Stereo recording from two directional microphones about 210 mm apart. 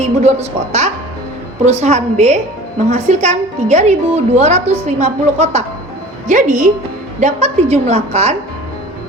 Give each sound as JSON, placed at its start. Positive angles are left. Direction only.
{"t": 0.0, "sound": "a woman's voice", "side_deg": -30}